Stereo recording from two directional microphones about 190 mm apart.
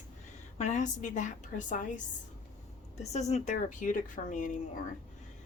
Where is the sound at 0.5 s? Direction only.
40° left (ahead or behind).